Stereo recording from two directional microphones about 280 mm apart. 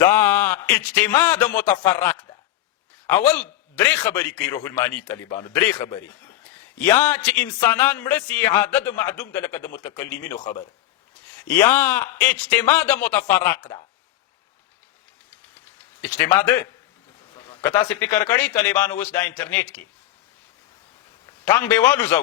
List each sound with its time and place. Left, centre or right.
0.0 s a man's voice: centre
16.0 s a man's voice: centre
21.4 s a man's voice: centre